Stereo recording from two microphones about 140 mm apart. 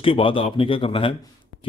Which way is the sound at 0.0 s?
40° left (ahead or behind).